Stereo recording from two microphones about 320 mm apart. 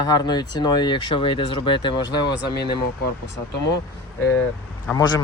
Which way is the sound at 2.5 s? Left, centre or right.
Left.